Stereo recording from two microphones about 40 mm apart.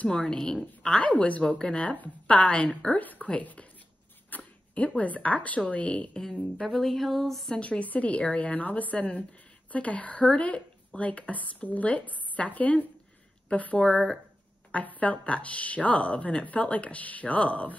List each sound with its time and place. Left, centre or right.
0.1 s speech: centre
1.0 s speech: left
1.4 s speech: left
1.8 s speech: left
2.9 s speech: left
6.8 s speech: centre
7.6 s speech: left
10.3 s a woman's voice: left
13.7 s speech: left
14.7 s speech: left